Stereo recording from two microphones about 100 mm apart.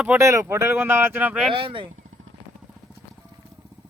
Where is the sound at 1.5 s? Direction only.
60° right (ahead or behind).